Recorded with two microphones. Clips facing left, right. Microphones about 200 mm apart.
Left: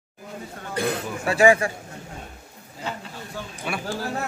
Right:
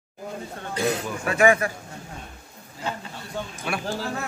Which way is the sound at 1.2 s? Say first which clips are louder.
Left 2 dB; 30° left (ahead or behind).